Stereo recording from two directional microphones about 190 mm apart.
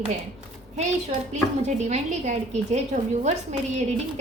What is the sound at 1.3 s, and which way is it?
A woman's voice, 40° right (ahead or behind).